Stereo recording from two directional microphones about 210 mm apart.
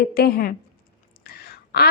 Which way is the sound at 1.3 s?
45° left (ahead or behind).